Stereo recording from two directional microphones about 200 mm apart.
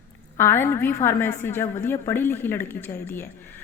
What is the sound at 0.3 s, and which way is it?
A woman's voice, 10° left (ahead or behind).